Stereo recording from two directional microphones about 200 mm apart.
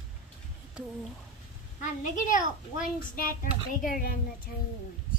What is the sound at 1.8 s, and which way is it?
A child's voice, 40° left (ahead or behind).